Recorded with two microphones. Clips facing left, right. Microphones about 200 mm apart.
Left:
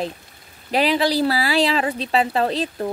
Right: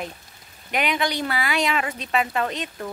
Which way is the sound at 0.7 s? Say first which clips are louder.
Left 6 dB; 30° left (ahead or behind).